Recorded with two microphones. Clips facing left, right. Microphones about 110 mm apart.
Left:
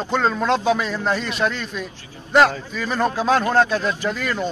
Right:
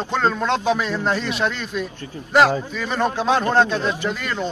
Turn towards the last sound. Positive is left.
turn(degrees=5)  # may be behind; listen again after turning